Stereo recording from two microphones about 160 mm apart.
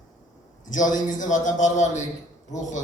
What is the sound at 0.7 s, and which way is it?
A man's voice, 55° left (ahead or behind).